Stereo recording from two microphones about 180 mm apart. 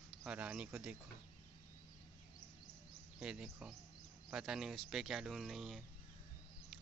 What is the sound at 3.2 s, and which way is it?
Speech, 5° right (ahead or behind).